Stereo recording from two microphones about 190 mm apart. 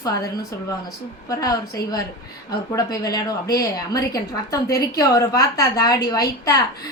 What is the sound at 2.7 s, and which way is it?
A woman's voice, 20° left (ahead or behind).